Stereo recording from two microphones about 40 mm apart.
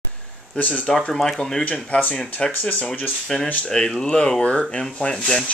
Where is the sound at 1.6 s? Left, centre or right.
Left.